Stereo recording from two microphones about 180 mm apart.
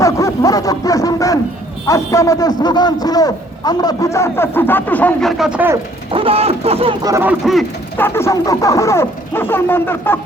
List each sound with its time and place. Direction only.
0.0 s a sound: 20° left (ahead or behind)
1.9 s speech: 15° left (ahead or behind)
5.4 s speech: 5° right (ahead or behind)
6.1 s speech: 30° right (ahead or behind)
7.0 s speech: 15° right (ahead or behind)
7.9 s speech: 10° left (ahead or behind)